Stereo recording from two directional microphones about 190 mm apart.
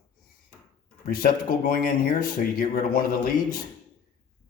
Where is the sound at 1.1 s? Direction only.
50° left (ahead or behind).